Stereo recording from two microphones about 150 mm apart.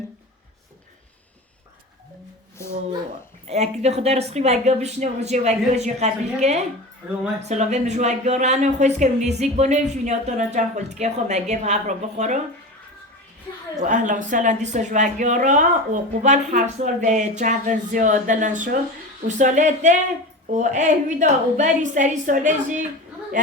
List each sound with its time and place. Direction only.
3.5 s speech: 45° right (ahead or behind)
13.8 s speech: 55° right (ahead or behind)